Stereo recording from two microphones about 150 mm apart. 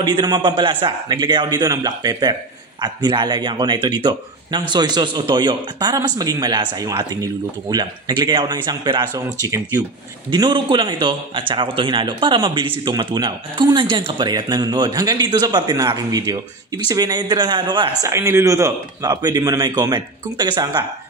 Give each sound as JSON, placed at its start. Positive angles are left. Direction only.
{"t": 0.0, "sound": "speech", "side_deg": -25}
{"t": 18.0, "sound": "speech", "side_deg": -20}